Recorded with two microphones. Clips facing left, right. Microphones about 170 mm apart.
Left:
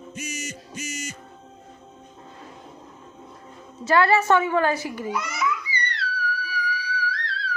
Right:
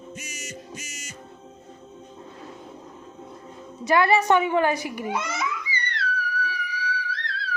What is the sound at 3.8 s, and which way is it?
A woman's voice, 15° right (ahead or behind).